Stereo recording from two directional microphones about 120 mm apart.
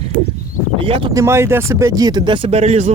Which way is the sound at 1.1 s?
25° right (ahead or behind).